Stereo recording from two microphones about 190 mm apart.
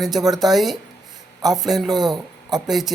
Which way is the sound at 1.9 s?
20° right (ahead or behind).